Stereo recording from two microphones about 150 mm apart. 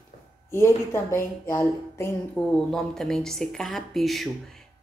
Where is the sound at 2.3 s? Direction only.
Centre (ahead or behind).